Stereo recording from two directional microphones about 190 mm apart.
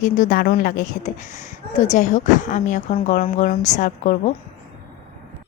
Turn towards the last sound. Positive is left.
turn(degrees=40)  # may be behind; listen again after turning